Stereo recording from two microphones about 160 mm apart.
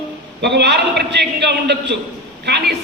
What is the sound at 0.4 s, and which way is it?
A man's voice, 90° right.